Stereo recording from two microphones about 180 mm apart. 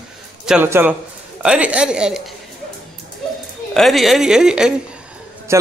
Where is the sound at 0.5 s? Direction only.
10° right (ahead or behind).